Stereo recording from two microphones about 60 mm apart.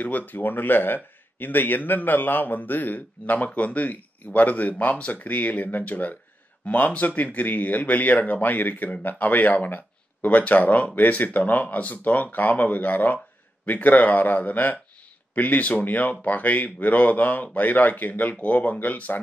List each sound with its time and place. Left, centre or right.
0.0 s speech: left